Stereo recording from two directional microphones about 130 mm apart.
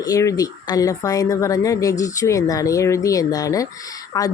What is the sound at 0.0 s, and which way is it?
Speech, 25° left (ahead or behind).